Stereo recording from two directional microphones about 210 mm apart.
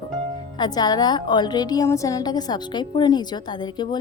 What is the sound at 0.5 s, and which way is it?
A woman's voice, 20° left (ahead or behind).